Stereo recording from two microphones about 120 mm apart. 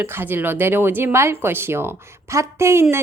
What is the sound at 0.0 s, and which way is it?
A woman's voice, 20° right (ahead or behind).